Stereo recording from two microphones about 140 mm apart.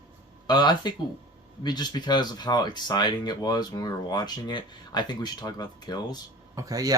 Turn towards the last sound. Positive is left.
turn(degrees=-25)  # may be behind; listen again after turning